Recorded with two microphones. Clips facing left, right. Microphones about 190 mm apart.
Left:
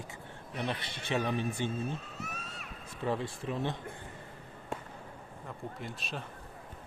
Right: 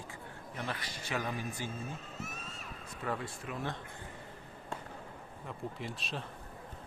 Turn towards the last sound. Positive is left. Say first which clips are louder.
# even
turn(degrees=0)  # may be behind; listen again after turning